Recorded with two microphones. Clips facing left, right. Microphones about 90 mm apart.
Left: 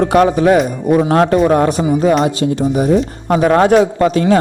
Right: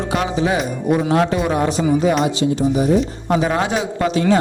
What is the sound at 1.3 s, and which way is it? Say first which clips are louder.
A man's voice: left 7 dB; 50° left (ahead or behind).